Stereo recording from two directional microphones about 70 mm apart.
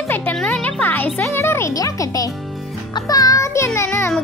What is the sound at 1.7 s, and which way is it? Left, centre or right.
Speech, left.